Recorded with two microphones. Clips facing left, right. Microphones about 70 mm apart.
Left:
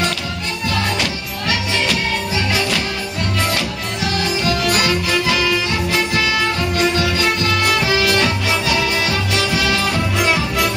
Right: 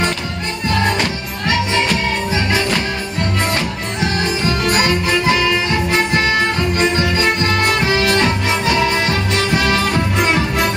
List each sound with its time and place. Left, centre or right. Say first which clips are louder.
0.7 s music: right 4 dB; right